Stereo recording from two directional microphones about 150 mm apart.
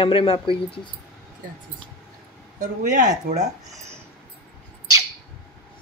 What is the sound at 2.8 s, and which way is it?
Speech, 60° right (ahead or behind).